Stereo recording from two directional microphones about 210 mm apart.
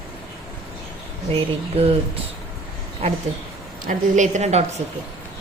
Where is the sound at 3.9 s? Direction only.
35° right (ahead or behind).